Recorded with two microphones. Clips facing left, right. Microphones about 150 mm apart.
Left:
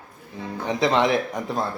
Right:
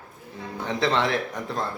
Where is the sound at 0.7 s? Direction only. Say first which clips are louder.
Left 4 dB; 15° left (ahead or behind).